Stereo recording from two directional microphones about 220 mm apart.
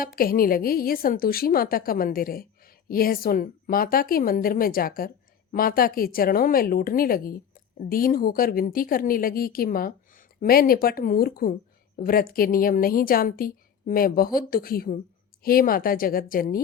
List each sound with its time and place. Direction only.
0.0 s a woman's voice: 40° left (ahead or behind)